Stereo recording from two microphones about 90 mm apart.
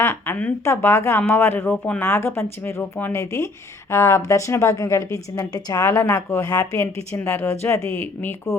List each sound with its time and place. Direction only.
0.0 s a woman's voice: 30° left (ahead or behind)